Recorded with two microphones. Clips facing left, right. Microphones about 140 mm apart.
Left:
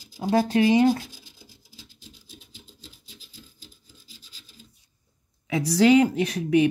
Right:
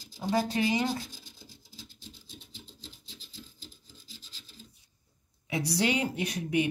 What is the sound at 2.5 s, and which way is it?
Filing, 10° left (ahead or behind).